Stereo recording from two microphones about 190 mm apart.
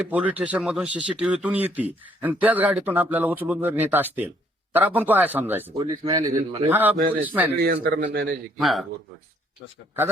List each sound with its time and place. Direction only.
0.1 s speech: 10° right (ahead or behind)
5.7 s speech: 20° right (ahead or behind)
6.7 s speech: 10° right (ahead or behind)
7.6 s a man's voice: 60° right (ahead or behind)
8.5 s speech: centre (ahead or behind)